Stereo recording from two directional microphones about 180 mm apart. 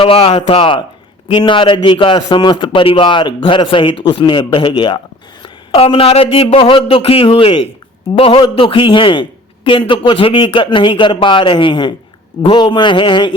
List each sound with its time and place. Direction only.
0.0 s a man's voice: 30° left (ahead or behind)